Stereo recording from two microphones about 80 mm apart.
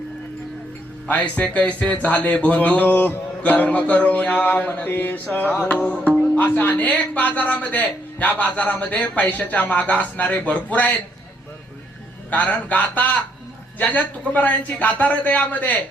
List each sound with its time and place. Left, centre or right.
1.0 s speech: centre
12.3 s speech: centre